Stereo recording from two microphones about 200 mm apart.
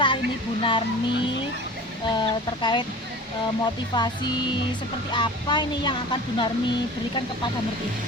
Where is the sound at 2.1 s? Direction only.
25° left (ahead or behind).